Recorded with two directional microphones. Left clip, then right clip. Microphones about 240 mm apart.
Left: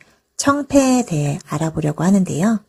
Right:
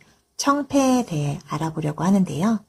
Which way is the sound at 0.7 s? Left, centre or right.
Centre.